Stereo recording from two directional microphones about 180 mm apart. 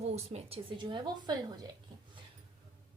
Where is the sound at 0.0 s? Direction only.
35° right (ahead or behind).